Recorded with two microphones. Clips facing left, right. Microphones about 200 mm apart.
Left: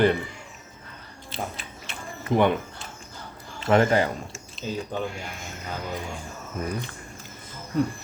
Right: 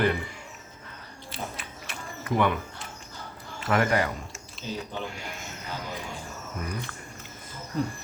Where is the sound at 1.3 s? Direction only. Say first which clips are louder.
Left 3 dB; 25° left (ahead or behind).